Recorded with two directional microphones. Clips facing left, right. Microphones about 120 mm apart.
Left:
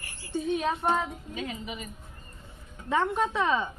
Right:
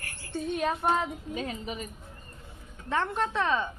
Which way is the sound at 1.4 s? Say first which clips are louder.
Even; 35° right (ahead or behind).